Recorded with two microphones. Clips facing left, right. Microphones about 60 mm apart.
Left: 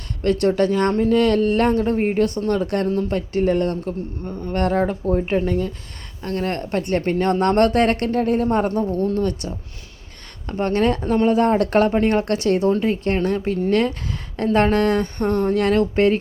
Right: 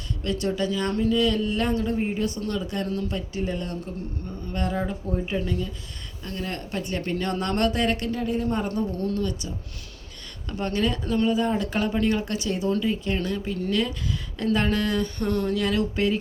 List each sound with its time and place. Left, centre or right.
0.2 s a woman's voice: left
2.8 s speech: left
3.2 s a woman's voice: left
4.6 s a woman's voice: left
10.4 s speech: left
11.3 s a woman's voice: left